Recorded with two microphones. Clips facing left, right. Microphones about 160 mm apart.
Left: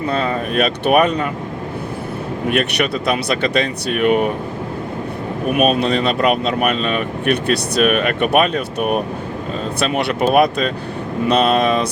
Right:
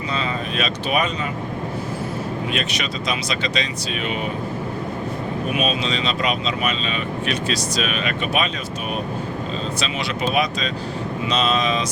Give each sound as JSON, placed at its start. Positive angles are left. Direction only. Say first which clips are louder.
{"t": 0.1, "sound": "speech", "louder": "left 5 dB", "side_deg": 55}
{"t": 2.5, "sound": "speech", "louder": "left 8 dB", "side_deg": 60}
{"t": 5.5, "sound": "speech", "louder": "left 9 dB", "side_deg": 55}